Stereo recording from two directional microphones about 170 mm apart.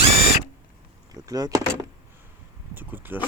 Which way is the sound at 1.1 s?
20° right (ahead or behind).